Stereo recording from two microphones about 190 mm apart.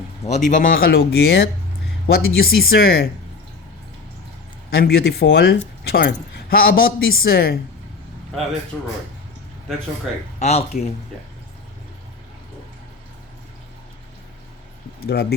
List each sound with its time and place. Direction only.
0.3 s speech: 40° left (ahead or behind); by 3.1 s 55° left (ahead or behind)
4.7 s speech: 55° left (ahead or behind)
8.7 s speech: 5° left (ahead or behind)
10.4 s speech: 35° left (ahead or behind)
15.0 s speech: 55° left (ahead or behind)